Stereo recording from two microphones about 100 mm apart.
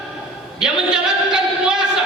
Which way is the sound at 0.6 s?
10° right (ahead or behind).